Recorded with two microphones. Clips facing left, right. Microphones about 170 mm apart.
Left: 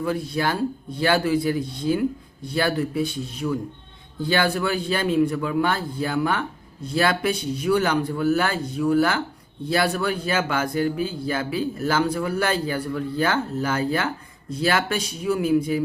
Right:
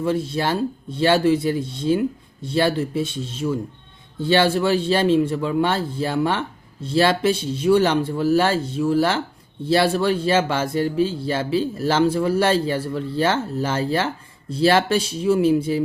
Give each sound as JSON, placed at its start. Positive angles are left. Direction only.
{"t": 0.0, "sound": "speech", "side_deg": -25}